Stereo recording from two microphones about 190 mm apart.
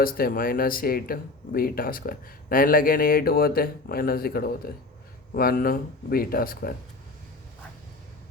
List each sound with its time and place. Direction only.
0.0 s speech: 50° left (ahead or behind)